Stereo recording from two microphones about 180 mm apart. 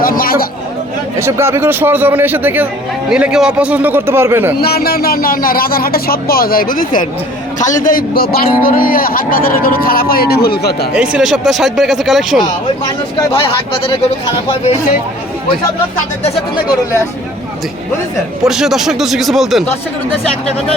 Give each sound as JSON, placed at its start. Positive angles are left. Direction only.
{"t": 0.0, "sound": "a sound", "side_deg": 55}
{"t": 1.2, "sound": "a man's voice", "side_deg": -15}
{"t": 4.6, "sound": "speech", "side_deg": 60}
{"t": 10.9, "sound": "speech", "side_deg": -5}
{"t": 13.3, "sound": "a man's voice", "side_deg": 30}
{"t": 18.4, "sound": "speech", "side_deg": 0}